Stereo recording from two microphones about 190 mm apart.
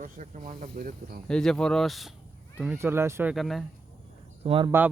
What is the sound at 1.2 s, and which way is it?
Speech, 5° left (ahead or behind).